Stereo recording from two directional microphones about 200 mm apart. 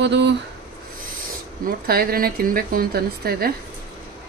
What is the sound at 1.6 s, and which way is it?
Speech, 50° right (ahead or behind).